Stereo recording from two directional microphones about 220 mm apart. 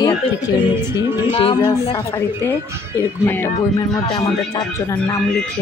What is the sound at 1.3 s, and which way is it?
Speech, 25° left (ahead or behind).